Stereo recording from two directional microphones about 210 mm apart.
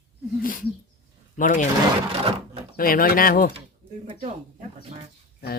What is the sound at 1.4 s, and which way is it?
Speech, 40° left (ahead or behind).